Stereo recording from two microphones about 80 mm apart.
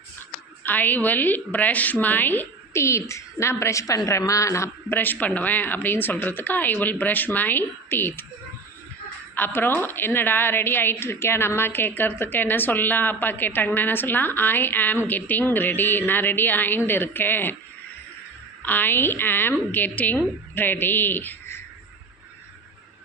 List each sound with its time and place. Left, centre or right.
0.6 s a woman's voice: left
4.9 s a woman's voice: left
9.3 s a woman's voice: left
18.6 s a woman's voice: left